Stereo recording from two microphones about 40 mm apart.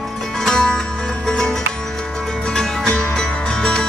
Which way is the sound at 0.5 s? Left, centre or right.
Centre.